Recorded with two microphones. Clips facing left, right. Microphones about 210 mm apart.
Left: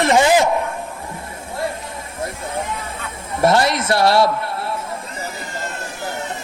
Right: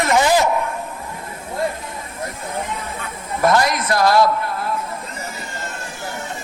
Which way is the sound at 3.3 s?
25° left (ahead or behind).